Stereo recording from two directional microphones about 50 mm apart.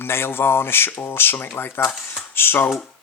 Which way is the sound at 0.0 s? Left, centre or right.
Left.